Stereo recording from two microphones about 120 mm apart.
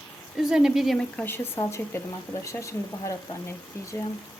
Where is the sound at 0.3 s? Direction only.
5° right (ahead or behind).